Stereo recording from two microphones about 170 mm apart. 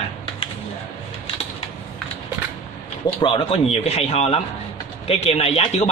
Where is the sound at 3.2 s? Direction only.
30° left (ahead or behind).